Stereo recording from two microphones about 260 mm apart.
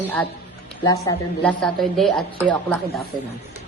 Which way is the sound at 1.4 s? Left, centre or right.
Centre.